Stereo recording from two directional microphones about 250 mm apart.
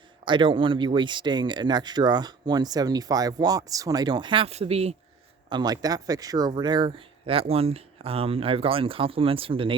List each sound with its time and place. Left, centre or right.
0.3 s speech: centre